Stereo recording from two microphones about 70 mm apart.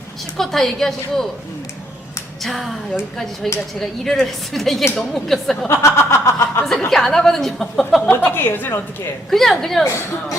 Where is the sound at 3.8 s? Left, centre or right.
Centre.